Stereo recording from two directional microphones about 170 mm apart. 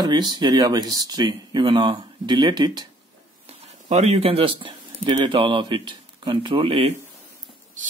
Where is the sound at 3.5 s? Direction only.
40° right (ahead or behind).